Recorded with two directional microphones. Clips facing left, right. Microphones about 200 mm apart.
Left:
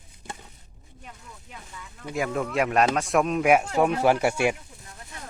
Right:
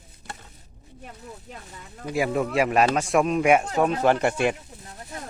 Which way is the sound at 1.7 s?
40° right (ahead or behind).